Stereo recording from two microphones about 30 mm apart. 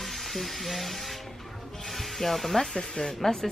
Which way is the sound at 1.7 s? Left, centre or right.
Centre.